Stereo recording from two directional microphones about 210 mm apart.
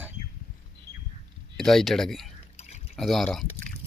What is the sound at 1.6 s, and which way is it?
Speech, centre (ahead or behind).